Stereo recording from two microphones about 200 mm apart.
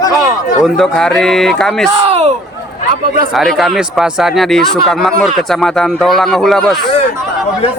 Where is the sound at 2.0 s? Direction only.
30° right (ahead or behind).